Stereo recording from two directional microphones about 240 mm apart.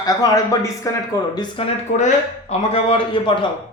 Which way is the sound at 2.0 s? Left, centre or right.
Left.